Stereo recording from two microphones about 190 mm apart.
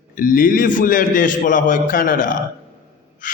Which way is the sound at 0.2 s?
45° left (ahead or behind).